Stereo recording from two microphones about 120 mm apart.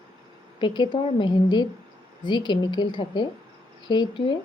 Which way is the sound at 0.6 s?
40° left (ahead or behind).